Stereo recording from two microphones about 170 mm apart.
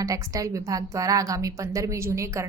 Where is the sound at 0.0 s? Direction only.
20° right (ahead or behind).